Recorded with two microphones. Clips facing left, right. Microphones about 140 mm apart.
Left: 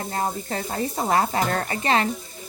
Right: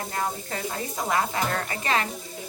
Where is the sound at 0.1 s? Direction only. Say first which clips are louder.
Left 5 dB; 35° left (ahead or behind).